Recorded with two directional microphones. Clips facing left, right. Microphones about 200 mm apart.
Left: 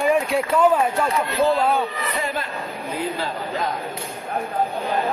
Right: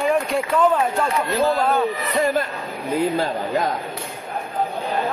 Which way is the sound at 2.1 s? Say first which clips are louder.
Right 8 dB; 40° right (ahead or behind).